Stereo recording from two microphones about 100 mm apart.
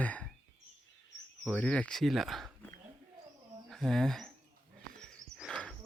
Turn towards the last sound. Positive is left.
turn(degrees=10)  # may be behind; listen again after turning